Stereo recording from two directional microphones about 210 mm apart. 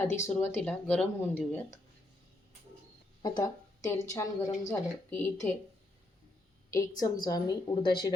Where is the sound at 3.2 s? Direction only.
15° left (ahead or behind).